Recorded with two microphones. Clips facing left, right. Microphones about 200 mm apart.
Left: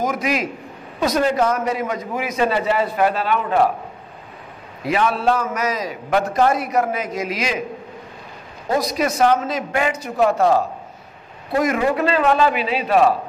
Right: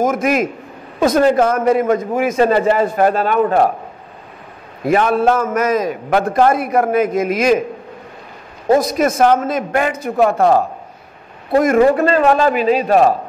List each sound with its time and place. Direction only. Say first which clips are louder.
0.0 s a man's voice: right 6 dB; 50° right (ahead or behind)
4.8 s a man's voice: right 5 dB; 50° right (ahead or behind)
8.7 s a man's voice: right 5 dB; 50° right (ahead or behind)